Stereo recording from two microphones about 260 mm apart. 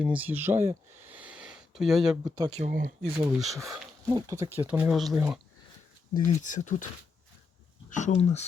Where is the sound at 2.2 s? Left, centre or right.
Centre.